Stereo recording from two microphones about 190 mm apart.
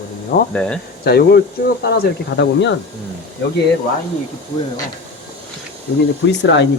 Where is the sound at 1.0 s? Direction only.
55° left (ahead or behind).